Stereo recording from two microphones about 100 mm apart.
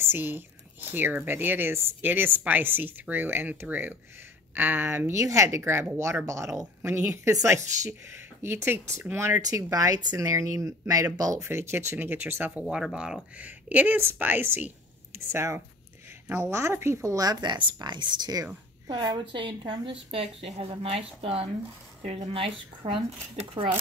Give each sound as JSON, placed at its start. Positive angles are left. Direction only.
{"t": 0.0, "sound": "speech", "side_deg": -20}
{"t": 9.4, "sound": "speech", "side_deg": -35}
{"t": 11.4, "sound": "speech", "side_deg": -25}
{"t": 12.6, "sound": "a woman's voice", "side_deg": -5}